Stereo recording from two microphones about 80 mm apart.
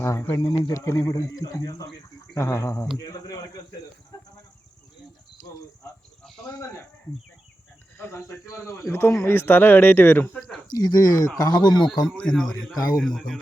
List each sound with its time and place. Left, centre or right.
0.0 s speech: left
0.3 s a man's voice: left
5.4 s cricket: left
7.9 s speech: left
10.8 s a man's voice: left
12.0 s speech: centre
12.7 s speech: left
13.0 s speech: centre